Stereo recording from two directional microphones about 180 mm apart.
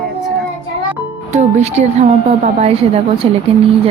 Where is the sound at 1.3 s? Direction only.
40° right (ahead or behind).